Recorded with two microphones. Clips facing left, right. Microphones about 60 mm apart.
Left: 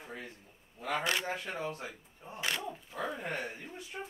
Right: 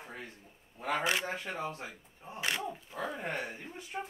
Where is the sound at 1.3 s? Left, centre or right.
Right.